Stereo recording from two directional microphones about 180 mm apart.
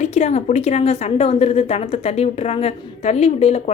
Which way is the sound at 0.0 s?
40° left (ahead or behind).